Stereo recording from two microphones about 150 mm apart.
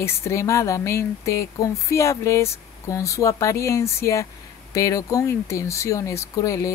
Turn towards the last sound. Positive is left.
turn(degrees=20)  # may be behind; listen again after turning